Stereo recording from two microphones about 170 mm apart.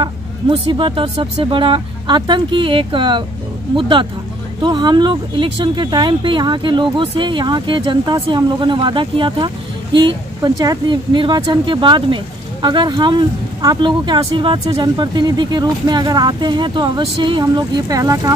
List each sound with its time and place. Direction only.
0.0 s speech: 30° right (ahead or behind)